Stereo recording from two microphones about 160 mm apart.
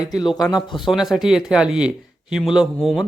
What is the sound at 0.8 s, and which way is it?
Speech, centre (ahead or behind).